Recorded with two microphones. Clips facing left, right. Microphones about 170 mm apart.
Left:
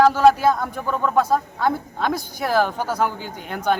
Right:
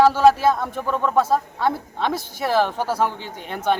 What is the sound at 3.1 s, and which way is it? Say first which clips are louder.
Speech: left 1 dB; 30° right (ahead or behind).